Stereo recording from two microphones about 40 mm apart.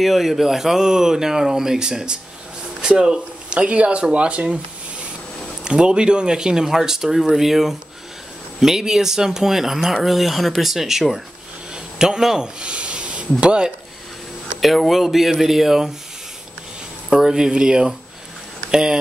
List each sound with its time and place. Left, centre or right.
0.0 s speech: centre; by 4.6 s right
5.6 s speech: right
11.7 s vehicle: centre
12.4 s a sound: right
13.4 s speech: right
14.9 s speech: centre
17.1 s speech: centre